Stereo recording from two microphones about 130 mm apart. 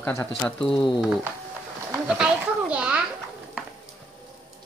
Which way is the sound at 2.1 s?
5° right (ahead or behind).